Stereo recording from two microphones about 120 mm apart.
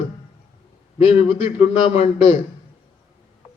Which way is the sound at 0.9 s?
55° left (ahead or behind).